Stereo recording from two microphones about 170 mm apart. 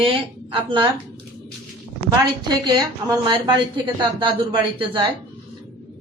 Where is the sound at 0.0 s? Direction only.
30° right (ahead or behind).